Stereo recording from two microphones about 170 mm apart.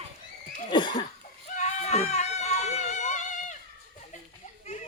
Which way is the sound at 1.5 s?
40° left (ahead or behind).